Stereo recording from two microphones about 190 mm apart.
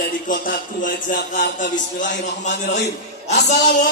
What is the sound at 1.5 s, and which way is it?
Speech, 40° left (ahead or behind).